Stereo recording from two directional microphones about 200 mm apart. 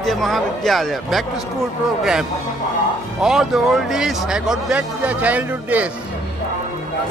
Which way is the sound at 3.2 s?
Centre (ahead or behind).